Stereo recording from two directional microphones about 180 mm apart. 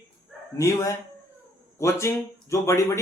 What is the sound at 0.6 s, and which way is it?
Speech, 15° left (ahead or behind).